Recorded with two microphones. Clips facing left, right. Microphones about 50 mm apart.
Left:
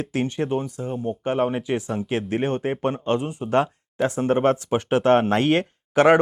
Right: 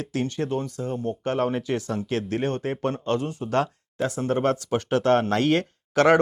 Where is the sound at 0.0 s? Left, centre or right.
Left.